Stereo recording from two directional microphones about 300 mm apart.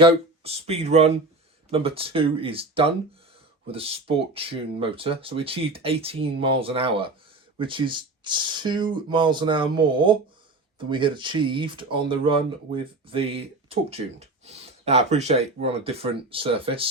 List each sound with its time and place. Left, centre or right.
0.0 s speech: centre